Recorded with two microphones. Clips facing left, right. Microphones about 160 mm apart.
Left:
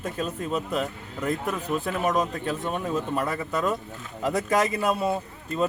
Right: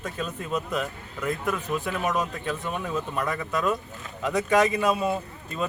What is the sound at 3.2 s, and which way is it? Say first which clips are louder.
A man's voice: left 1 dB; 30° left (ahead or behind).